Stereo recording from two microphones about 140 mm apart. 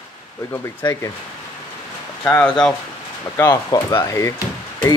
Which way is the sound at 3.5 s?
25° left (ahead or behind).